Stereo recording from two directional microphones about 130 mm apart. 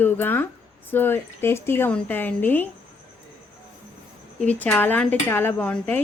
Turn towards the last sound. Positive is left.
turn(degrees=10)  # may be behind; listen again after turning